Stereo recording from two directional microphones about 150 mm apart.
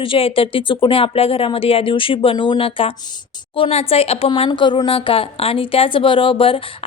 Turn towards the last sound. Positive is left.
turn(degrees=35)  # may be behind; listen again after turning